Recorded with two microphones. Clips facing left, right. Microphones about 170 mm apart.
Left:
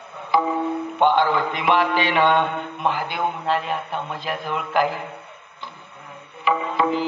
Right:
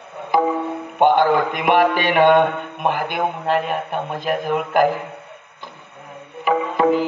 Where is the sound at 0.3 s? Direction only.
45° right (ahead or behind).